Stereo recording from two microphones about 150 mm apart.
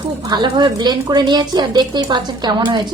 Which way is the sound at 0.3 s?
30° right (ahead or behind).